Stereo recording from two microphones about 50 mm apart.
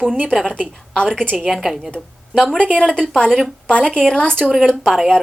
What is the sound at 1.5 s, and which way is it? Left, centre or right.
Speech, centre.